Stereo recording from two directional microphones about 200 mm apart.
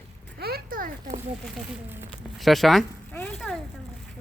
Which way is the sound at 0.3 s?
50° right (ahead or behind).